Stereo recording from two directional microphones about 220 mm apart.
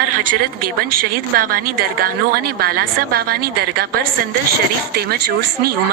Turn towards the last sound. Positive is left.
turn(degrees=-45)  # may be behind; listen again after turning